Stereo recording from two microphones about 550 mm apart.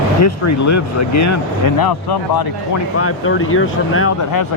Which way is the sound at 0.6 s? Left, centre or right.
Left.